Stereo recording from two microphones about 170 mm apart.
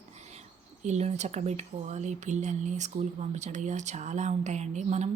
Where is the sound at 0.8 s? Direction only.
40° right (ahead or behind).